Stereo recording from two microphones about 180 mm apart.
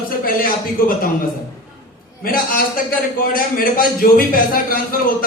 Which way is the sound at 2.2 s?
55° left (ahead or behind).